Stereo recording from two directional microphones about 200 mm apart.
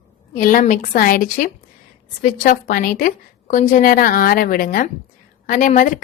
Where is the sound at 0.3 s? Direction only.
40° left (ahead or behind).